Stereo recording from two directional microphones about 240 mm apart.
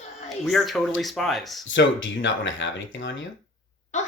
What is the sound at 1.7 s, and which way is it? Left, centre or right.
Speech, left.